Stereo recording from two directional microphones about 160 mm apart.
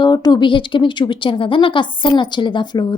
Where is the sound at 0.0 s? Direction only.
25° left (ahead or behind).